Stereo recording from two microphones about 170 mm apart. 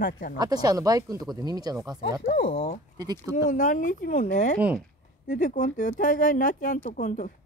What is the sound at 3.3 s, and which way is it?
Speech, 50° left (ahead or behind).